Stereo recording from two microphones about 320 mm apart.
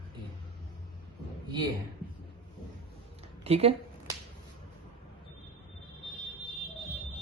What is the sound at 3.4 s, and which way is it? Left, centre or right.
Speech, centre.